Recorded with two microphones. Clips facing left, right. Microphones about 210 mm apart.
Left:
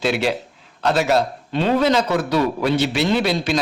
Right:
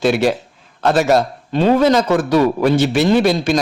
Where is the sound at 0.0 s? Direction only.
45° right (ahead or behind).